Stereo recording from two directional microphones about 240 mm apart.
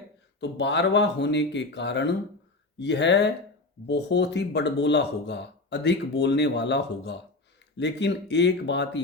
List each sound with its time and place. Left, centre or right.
0.3 s speech: left